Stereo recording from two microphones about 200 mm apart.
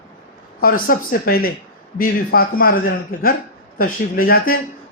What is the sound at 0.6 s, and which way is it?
A man's voice, 45° left (ahead or behind).